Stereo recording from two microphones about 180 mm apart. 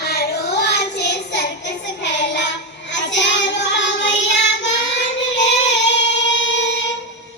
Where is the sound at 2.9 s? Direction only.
85° left.